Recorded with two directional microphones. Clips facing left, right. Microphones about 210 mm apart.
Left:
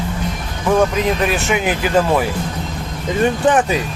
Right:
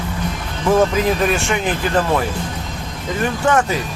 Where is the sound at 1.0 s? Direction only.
Centre (ahead or behind).